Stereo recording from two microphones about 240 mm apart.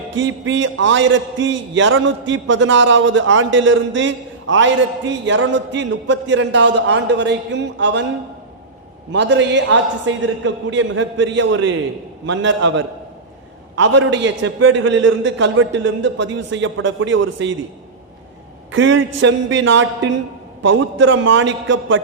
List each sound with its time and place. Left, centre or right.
0.2 s a man's voice: right
9.1 s a man's voice: right
18.7 s a man's voice: right